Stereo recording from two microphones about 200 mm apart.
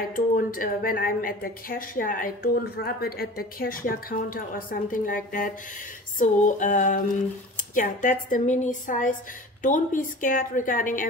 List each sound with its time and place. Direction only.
0.1 s a woman's voice: 45° left (ahead or behind)